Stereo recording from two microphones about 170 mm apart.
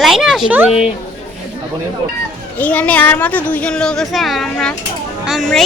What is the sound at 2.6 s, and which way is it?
Speech, 10° left (ahead or behind).